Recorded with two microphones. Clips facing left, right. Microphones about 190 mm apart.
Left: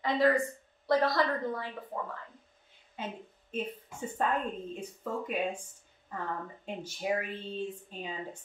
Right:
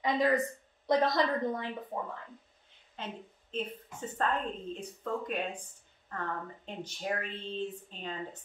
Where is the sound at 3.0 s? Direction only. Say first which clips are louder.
Left 2 dB; 10° left (ahead or behind).